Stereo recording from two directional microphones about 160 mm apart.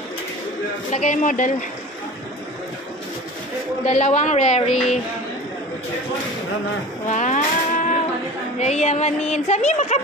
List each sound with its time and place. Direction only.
0.9 s speech: 50° left (ahead or behind)
3.8 s speech: 45° left (ahead or behind)
7.1 s music: 50° left (ahead or behind)
8.5 s speech: 45° left (ahead or behind)